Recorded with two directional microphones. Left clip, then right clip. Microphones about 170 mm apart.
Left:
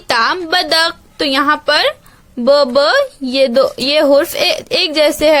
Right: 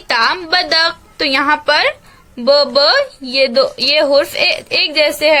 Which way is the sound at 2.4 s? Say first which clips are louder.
Left 1 dB; 40° left (ahead or behind).